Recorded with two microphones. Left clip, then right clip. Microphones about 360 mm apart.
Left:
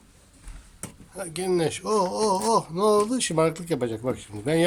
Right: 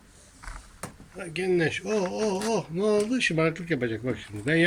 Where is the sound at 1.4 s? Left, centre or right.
Centre.